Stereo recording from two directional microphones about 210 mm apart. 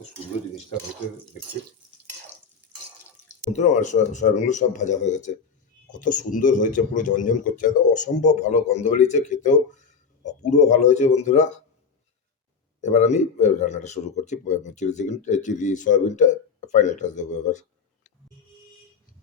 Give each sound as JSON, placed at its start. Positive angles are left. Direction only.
{"t": 3.5, "sound": "speech", "side_deg": 35}
{"t": 12.8, "sound": "speech", "side_deg": 35}